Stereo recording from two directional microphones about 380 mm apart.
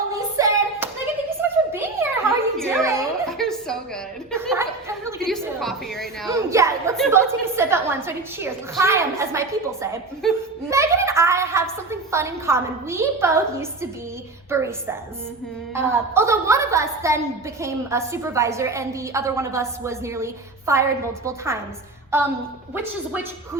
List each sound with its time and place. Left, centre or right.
0.1 s hands: centre
1.4 s a sound: centre
4.3 s a woman's voice: centre